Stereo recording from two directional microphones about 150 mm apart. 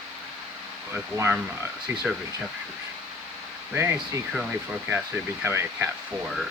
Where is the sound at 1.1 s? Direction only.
15° right (ahead or behind).